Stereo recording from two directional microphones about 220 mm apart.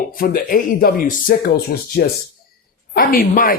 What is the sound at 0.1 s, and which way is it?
Speech, 40° left (ahead or behind).